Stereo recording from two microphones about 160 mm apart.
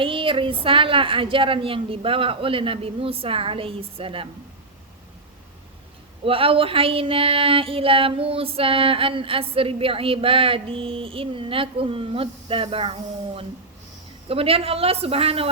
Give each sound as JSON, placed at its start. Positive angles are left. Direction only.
{"t": 0.0, "sound": "child singing", "side_deg": -35}
{"t": 6.2, "sound": "child singing", "side_deg": -35}